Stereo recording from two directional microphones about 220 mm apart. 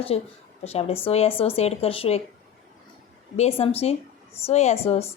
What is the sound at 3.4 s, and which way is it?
Speech, 25° left (ahead or behind).